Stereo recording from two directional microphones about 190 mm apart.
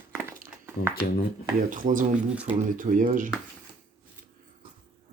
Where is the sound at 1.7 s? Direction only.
45° right (ahead or behind).